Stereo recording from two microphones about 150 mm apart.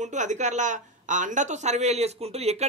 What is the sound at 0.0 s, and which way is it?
Speech, 55° right (ahead or behind).